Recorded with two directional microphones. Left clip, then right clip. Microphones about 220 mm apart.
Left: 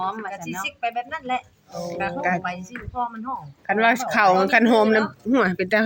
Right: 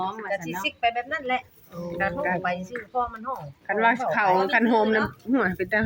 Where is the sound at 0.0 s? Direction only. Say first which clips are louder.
Left 3 dB; 30° left (ahead or behind).